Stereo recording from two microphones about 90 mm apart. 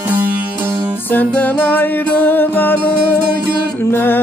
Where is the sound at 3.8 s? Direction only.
25° left (ahead or behind).